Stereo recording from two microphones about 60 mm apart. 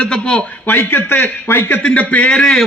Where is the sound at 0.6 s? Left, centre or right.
Left.